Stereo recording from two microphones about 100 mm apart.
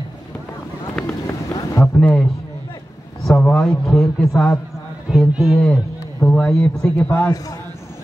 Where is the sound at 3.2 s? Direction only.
Centre (ahead or behind).